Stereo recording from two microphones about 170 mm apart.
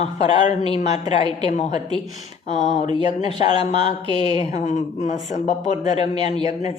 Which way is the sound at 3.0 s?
40° left (ahead or behind).